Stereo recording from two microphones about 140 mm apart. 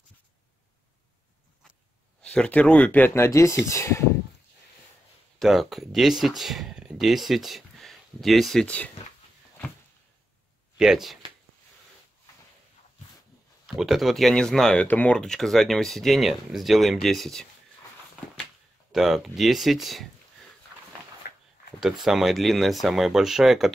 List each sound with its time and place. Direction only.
2.2 s speech: 10° left (ahead or behind)
5.4 s speech: centre (ahead or behind)
10.8 s speech: centre (ahead or behind)
13.7 s speech: centre (ahead or behind)
21.2 s a sound: 90° left
21.7 s speech: centre (ahead or behind)